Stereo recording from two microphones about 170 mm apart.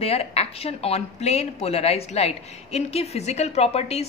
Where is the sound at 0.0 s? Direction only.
35° left (ahead or behind).